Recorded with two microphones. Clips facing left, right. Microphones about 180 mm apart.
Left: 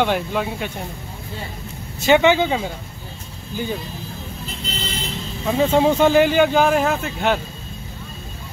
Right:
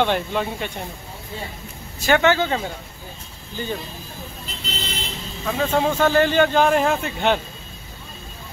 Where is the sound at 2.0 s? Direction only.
15° left (ahead or behind).